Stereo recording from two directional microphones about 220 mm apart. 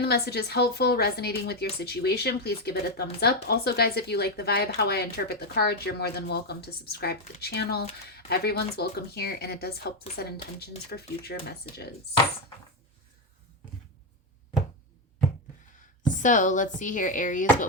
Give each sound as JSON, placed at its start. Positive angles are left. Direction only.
{"t": 0.0, "sound": "speech", "side_deg": 45}
{"t": 16.2, "sound": "speech", "side_deg": 35}